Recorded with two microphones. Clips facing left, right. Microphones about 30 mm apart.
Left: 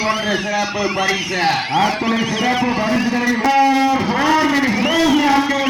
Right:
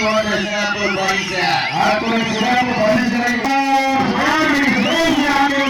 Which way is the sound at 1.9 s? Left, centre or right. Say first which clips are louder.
Right 2 dB; right.